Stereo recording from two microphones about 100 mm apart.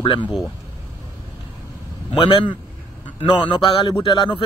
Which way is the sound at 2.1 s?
55° left (ahead or behind).